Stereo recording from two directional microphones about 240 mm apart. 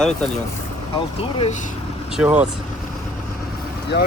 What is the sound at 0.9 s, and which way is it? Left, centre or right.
Speech, left.